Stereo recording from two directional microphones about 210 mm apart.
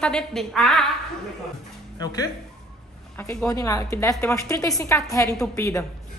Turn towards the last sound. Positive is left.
turn(degrees=15)  # may be behind; listen again after turning